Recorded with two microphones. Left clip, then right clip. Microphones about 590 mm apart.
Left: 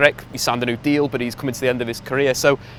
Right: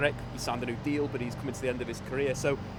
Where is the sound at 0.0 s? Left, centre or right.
Left.